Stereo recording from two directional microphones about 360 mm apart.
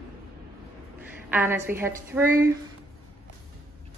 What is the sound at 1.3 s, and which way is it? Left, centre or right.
A woman's voice, centre.